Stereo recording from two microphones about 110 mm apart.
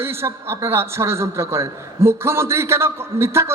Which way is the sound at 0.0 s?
20° right (ahead or behind).